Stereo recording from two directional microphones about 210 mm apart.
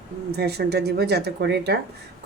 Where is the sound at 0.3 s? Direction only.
50° right (ahead or behind).